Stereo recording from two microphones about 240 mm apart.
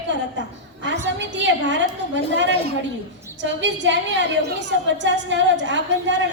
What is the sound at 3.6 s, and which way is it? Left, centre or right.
A woman's voice, right.